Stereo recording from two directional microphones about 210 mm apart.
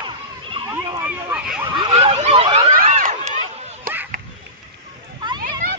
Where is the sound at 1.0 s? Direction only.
5° right (ahead or behind).